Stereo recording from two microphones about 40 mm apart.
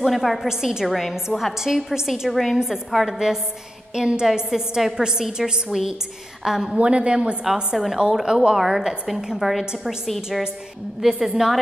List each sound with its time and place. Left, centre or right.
0.0 s a woman's voice: centre
0.5 s a woman's voice: centre
0.8 s a woman's voice: centre
2.9 s a woman's voice: centre
3.9 s a woman's voice: centre
6.8 s a woman's voice: right
7.7 s a woman's voice: centre
8.5 s a woman's voice: centre